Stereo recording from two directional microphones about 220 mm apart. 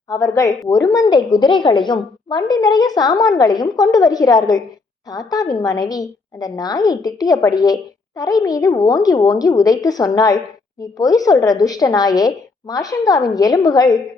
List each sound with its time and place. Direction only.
0.1 s a woman's voice: 15° left (ahead or behind)